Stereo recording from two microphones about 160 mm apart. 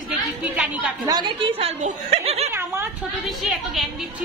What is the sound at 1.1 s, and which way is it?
A woman's voice, 30° right (ahead or behind).